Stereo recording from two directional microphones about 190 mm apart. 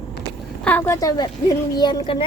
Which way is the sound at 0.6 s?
10° left (ahead or behind).